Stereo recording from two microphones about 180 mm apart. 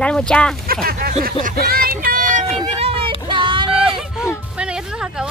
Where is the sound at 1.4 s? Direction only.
55° right (ahead or behind).